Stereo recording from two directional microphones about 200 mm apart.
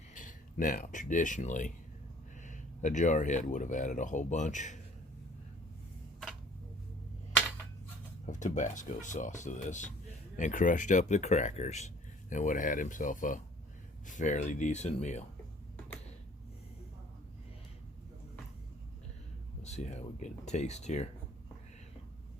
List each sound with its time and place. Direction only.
0.1 s speech: 40° left (ahead or behind)
8.3 s speech: 40° left (ahead or behind)
19.6 s speech: 35° left (ahead or behind)